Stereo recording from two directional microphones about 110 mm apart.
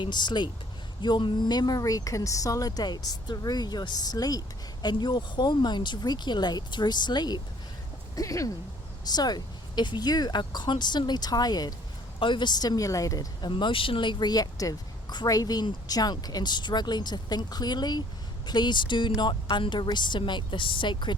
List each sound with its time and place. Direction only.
0.0 s a woman's voice: 45° left (ahead or behind)
8.1 s speech: 30° left (ahead or behind)
13.5 s a woman's voice: 50° left (ahead or behind)